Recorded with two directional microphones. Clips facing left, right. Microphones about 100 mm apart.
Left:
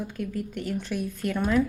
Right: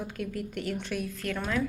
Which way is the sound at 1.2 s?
15° left (ahead or behind).